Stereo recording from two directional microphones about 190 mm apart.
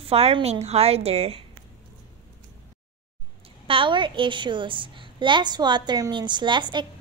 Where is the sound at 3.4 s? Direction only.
30° right (ahead or behind).